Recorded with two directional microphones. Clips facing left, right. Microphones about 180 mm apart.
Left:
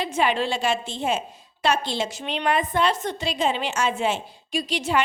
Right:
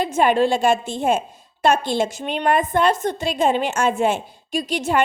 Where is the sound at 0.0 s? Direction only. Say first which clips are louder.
Right 6 dB; 50° right (ahead or behind).